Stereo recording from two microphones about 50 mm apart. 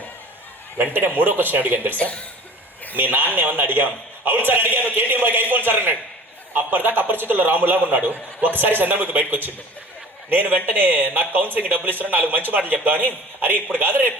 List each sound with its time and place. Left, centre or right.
0.8 s speech: right
2.0 s speech: left
2.9 s a man's voice: right